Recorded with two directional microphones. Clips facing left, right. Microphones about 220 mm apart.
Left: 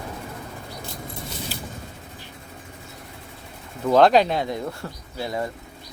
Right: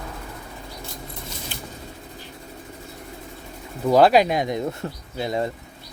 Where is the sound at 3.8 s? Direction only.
10° right (ahead or behind).